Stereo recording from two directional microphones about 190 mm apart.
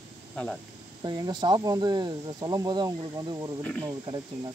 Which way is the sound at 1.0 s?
20° right (ahead or behind).